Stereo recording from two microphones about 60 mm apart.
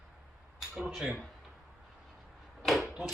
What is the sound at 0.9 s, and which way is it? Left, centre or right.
Speech, centre.